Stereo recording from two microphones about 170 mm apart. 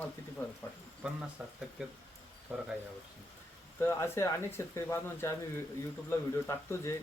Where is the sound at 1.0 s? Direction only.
5° right (ahead or behind).